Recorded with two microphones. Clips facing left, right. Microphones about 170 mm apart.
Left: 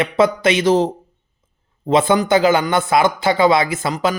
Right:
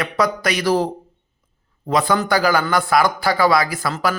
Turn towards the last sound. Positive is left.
turn(degrees=20)  # may be behind; listen again after turning